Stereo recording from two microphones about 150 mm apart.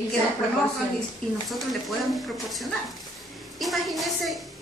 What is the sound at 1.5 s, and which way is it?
A woman's voice, centre (ahead or behind).